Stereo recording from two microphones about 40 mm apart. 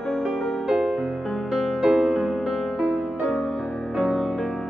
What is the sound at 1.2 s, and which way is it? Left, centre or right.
Music, centre.